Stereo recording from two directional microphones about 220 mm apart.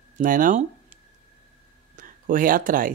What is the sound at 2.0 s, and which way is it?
Speech, 40° right (ahead or behind).